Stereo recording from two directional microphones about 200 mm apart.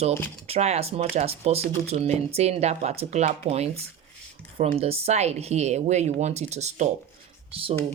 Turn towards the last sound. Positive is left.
turn(degrees=-30)  # may be behind; listen again after turning